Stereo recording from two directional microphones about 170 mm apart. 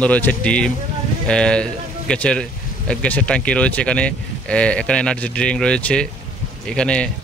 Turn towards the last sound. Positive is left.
turn(degrees=5)  # may be behind; listen again after turning